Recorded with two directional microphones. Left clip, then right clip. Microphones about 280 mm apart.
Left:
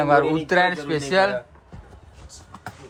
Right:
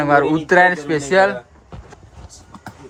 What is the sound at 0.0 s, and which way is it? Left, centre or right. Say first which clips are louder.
Speech: right 3 dB; centre.